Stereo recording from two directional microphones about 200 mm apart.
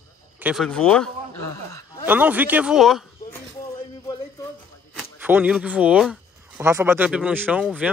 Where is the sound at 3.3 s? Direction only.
15° left (ahead or behind).